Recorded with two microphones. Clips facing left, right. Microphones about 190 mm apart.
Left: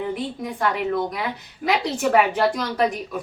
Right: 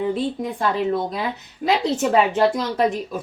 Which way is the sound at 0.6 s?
25° right (ahead or behind).